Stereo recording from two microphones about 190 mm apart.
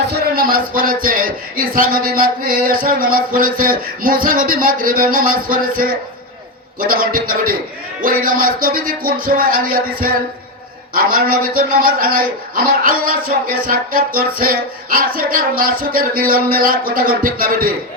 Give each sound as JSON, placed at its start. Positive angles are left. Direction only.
{"t": 0.1, "sound": "a man's voice", "side_deg": -50}